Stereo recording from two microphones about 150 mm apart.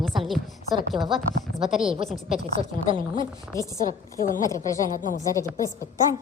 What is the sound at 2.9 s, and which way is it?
Speech, 35° right (ahead or behind).